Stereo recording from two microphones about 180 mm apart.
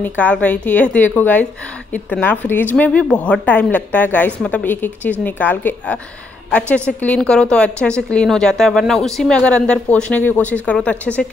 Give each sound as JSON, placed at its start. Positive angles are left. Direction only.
{"t": 0.0, "sound": "a woman's voice", "side_deg": 10}